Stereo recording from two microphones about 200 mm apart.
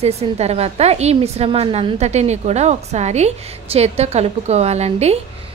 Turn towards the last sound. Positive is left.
turn(degrees=-30)  # may be behind; listen again after turning